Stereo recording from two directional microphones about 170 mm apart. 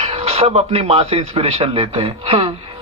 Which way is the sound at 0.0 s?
35° right (ahead or behind).